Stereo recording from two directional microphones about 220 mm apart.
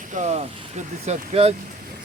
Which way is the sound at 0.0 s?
35° right (ahead or behind).